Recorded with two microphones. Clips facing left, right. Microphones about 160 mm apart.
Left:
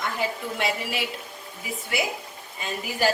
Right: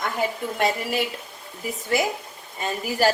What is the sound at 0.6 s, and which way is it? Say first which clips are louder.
Speech: right 5 dB; 45° right (ahead or behind).